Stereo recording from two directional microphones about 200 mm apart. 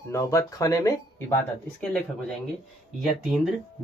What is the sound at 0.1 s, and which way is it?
Speech, 15° left (ahead or behind).